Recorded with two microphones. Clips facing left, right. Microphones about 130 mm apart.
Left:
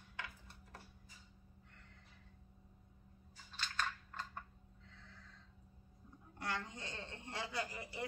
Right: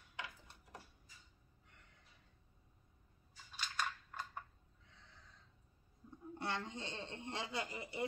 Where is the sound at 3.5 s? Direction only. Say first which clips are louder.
Even; 10° right (ahead or behind).